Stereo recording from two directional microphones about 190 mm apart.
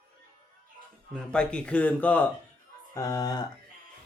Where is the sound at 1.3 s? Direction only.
5° left (ahead or behind).